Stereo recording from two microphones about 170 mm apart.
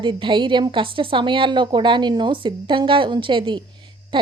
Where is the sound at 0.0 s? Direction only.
30° right (ahead or behind).